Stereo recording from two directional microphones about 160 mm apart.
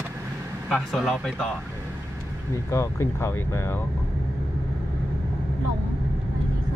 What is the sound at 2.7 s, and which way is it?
Speech, 15° left (ahead or behind).